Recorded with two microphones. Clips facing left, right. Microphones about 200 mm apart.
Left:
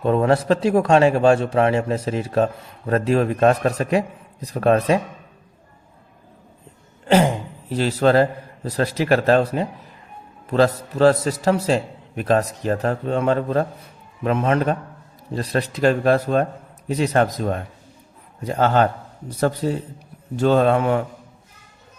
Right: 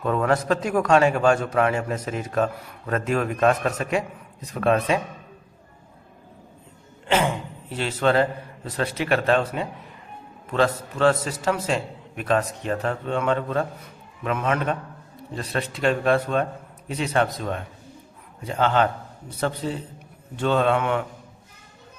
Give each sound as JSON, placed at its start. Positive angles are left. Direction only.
{"t": 0.0, "sound": "a man's voice", "side_deg": 30}
{"t": 7.1, "sound": "a man's voice", "side_deg": 35}